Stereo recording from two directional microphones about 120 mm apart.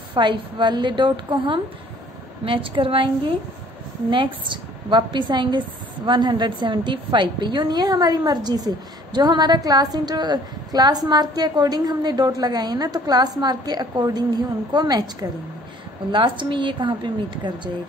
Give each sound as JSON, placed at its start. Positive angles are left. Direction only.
{"t": 0.1, "sound": "a woman's voice", "side_deg": -40}
{"t": 4.1, "sound": "a woman's voice", "side_deg": -40}